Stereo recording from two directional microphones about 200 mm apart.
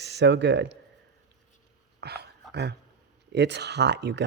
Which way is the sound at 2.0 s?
55° right (ahead or behind).